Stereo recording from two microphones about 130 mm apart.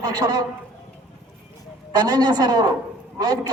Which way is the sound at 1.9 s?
30° right (ahead or behind).